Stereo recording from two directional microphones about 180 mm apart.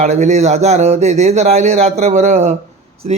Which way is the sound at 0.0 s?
40° right (ahead or behind).